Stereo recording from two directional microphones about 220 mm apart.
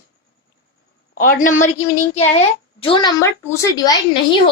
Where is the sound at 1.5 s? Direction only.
35° left (ahead or behind).